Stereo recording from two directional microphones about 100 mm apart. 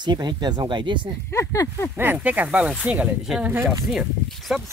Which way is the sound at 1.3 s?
30° left (ahead or behind).